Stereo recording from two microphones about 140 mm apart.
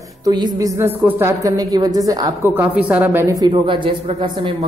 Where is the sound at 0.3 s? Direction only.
30° right (ahead or behind).